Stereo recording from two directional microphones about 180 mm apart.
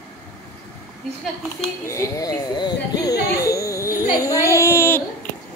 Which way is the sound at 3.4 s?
20° left (ahead or behind).